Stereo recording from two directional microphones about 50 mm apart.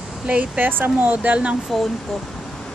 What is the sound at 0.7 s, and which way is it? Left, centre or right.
Speech, right.